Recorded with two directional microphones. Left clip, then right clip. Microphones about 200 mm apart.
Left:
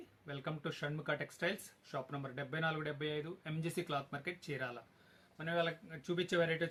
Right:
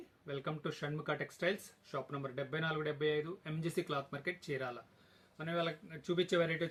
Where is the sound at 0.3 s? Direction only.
15° left (ahead or behind).